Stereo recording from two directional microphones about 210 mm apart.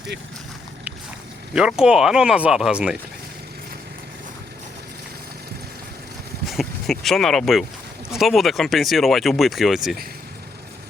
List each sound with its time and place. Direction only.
1.5 s speech: 5° right (ahead or behind)
6.4 s speech: centre (ahead or behind)